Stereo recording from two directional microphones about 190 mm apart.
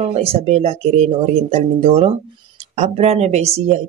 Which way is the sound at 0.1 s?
30° right (ahead or behind).